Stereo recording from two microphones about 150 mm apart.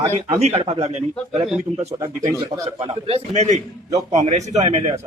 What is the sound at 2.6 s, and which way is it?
A man's voice, 40° right (ahead or behind).